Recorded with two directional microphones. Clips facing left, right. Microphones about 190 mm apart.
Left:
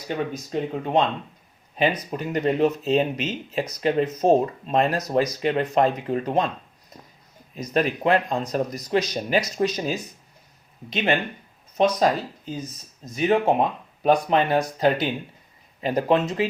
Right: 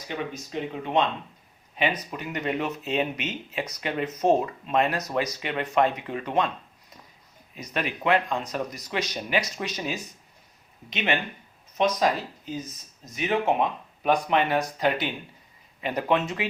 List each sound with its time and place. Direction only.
0.1 s speech: 40° left (ahead or behind)
7.5 s speech: 40° left (ahead or behind)
13.1 s speech: 35° left (ahead or behind)